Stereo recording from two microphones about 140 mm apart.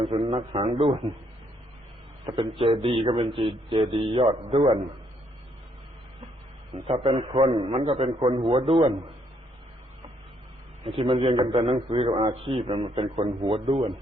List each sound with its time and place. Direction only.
0.1 s a man's voice: 50° right (ahead or behind)
2.2 s a man's voice: 35° right (ahead or behind)
6.7 s a man's voice: 50° right (ahead or behind)
10.8 s a man's voice: 40° right (ahead or behind)